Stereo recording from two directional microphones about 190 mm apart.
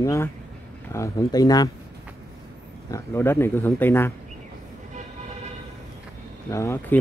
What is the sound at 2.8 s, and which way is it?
Speech, 15° left (ahead or behind).